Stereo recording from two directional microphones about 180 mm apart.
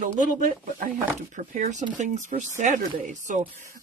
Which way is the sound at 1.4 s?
40° right (ahead or behind).